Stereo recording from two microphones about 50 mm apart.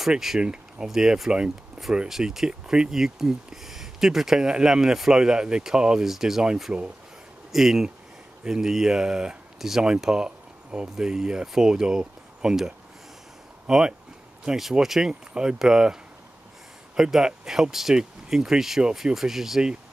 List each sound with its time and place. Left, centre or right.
0.1 s speech: centre
0.4 s speech: centre
7.5 s speech: centre